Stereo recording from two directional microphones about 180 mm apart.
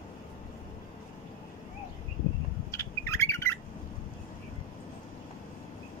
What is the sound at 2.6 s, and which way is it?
Bird, 15° left (ahead or behind).